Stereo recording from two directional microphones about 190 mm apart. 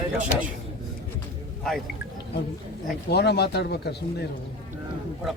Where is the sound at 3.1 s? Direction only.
60° left (ahead or behind).